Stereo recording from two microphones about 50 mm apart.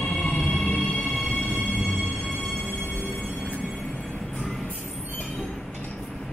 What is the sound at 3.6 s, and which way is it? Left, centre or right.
Train, centre.